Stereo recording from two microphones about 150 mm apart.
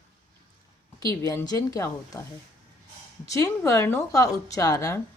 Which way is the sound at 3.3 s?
20° left (ahead or behind).